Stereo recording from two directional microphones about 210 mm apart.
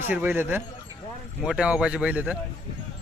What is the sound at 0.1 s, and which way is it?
Speech, 10° right (ahead or behind).